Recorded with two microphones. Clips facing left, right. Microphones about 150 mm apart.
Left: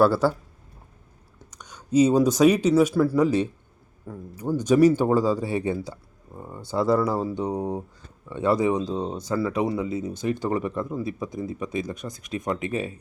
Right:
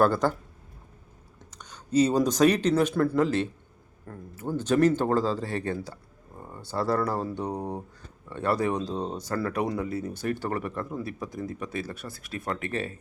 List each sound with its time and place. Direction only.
0.0 s speech: 10° left (ahead or behind)
1.5 s speech: 10° left (ahead or behind)
3.2 s speech: 15° left (ahead or behind)